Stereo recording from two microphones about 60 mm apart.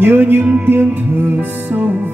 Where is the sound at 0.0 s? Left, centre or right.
Right.